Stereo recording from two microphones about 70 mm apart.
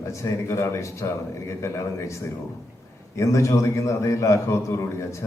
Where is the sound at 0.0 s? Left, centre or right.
Left.